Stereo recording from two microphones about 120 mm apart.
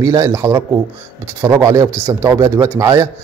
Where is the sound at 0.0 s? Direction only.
25° right (ahead or behind).